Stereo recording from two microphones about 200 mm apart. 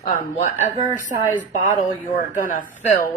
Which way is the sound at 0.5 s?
10° right (ahead or behind).